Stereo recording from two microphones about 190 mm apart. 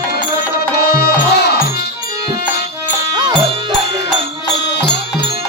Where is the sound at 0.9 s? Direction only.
60° left (ahead or behind).